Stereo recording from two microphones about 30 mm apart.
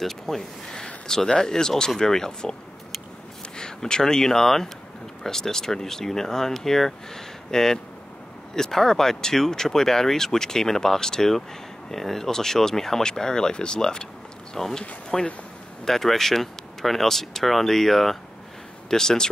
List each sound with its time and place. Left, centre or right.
0.0 s speech: centre
1.0 s speech: centre
13.0 s speech: left